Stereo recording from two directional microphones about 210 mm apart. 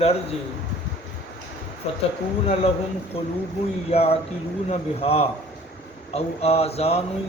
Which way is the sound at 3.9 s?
30° left (ahead or behind).